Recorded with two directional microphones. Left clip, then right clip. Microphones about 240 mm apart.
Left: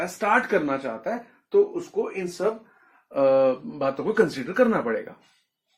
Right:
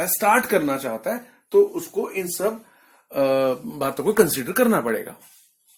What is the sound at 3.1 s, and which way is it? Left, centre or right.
Speech, right.